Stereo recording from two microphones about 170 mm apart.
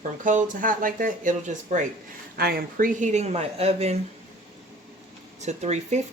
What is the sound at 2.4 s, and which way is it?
Speech, 65° right (ahead or behind).